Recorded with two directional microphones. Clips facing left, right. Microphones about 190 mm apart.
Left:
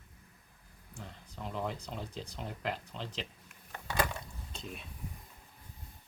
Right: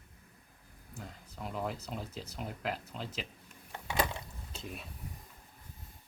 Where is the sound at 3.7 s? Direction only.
20° right (ahead or behind).